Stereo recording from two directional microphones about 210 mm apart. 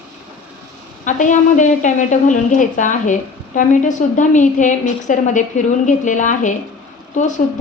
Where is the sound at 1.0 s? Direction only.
35° left (ahead or behind).